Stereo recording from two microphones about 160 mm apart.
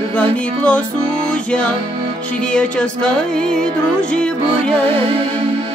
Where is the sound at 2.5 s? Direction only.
5° left (ahead or behind).